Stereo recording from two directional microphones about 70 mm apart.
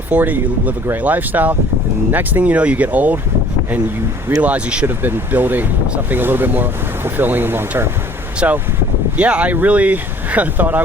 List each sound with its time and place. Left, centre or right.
0.1 s speech: right
4.4 s speech: centre
4.9 s speech: right
8.4 s speech: right